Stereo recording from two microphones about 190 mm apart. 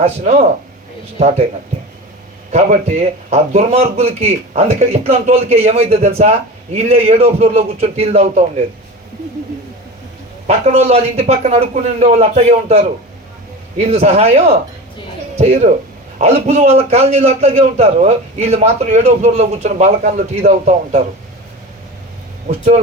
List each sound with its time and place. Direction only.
0.0 s a man's voice: 35° right (ahead or behind)
2.5 s a man's voice: 35° right (ahead or behind)
10.4 s a man's voice: 35° right (ahead or behind)
22.4 s a man's voice: 40° right (ahead or behind)